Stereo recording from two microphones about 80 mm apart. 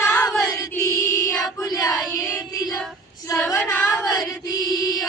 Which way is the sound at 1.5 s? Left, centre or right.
Left.